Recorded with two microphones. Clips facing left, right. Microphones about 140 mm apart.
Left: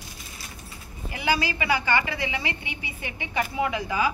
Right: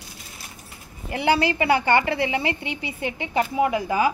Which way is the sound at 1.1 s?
60° right (ahead or behind).